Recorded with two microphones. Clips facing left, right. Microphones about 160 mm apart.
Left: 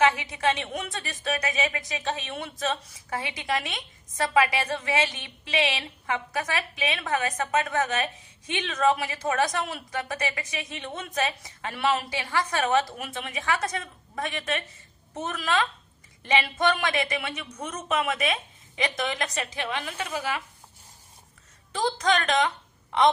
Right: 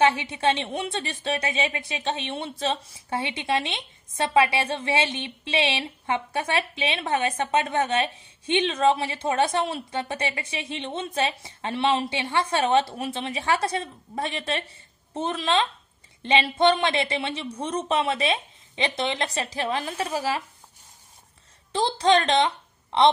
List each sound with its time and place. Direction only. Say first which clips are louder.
0.0 s a woman's voice: right 2 dB; 30° right (ahead or behind)
21.7 s a woman's voice: right 4 dB; 30° right (ahead or behind)